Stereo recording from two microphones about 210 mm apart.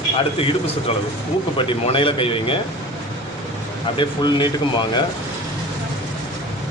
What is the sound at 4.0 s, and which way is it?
Speech, 20° left (ahead or behind).